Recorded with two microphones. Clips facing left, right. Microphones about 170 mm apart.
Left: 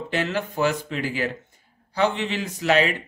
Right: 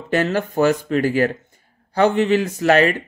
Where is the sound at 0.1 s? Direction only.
45° right (ahead or behind).